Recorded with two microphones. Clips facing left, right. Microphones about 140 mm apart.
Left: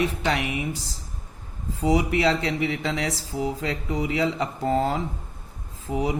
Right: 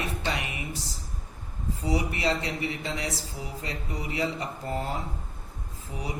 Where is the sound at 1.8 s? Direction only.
90° left.